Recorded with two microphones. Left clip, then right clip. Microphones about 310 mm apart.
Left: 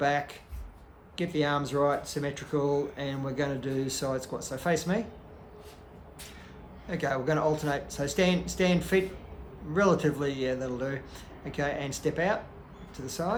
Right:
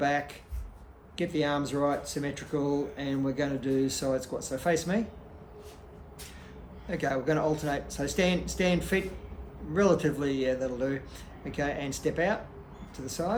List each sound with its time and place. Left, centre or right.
0.0 s speech: left
6.8 s speech: left